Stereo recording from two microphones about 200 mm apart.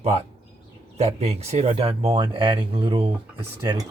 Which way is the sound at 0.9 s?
30° right (ahead or behind).